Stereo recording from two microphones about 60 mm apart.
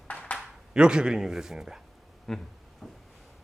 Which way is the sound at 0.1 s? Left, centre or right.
Left.